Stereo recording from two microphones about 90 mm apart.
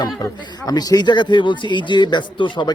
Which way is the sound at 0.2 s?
45° left (ahead or behind).